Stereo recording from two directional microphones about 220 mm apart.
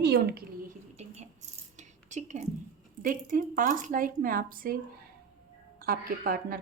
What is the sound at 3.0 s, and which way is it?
A woman's voice, 35° right (ahead or behind).